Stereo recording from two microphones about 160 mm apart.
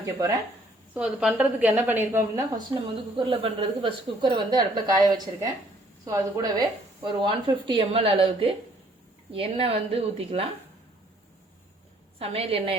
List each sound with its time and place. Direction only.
0.0 s a woman's voice: 20° right (ahead or behind)
0.9 s a woman's voice: 5° right (ahead or behind); by 2.7 s 20° right (ahead or behind)
3.2 s a woman's voice: 35° right (ahead or behind)
12.2 s a woman's voice: 40° right (ahead or behind)